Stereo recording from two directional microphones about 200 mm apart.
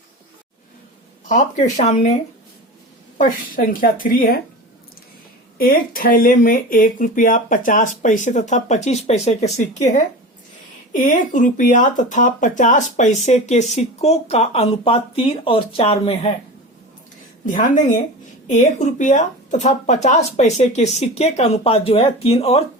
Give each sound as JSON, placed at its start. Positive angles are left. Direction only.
{"t": 1.3, "sound": "speech", "side_deg": 35}
{"t": 3.2, "sound": "speech", "side_deg": 45}
{"t": 5.5, "sound": "speech", "side_deg": 45}
{"t": 17.4, "sound": "speech", "side_deg": 40}